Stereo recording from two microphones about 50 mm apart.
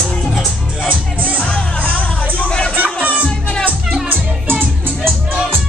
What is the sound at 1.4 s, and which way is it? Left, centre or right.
Music, left.